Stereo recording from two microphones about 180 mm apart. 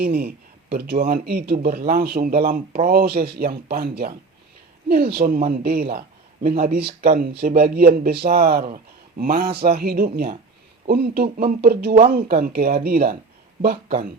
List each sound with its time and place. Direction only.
0.0 s a man's voice: 60° right (ahead or behind)